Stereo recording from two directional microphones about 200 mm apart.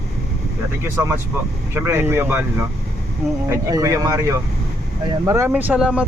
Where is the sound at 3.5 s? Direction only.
15° right (ahead or behind).